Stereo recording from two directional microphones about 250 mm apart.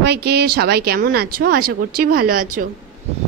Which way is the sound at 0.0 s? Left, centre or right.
Right.